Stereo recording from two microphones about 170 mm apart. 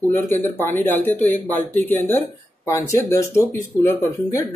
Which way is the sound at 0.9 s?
10° left (ahead or behind).